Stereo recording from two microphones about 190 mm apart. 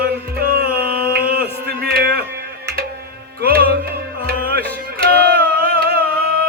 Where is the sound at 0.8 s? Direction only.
55° right (ahead or behind).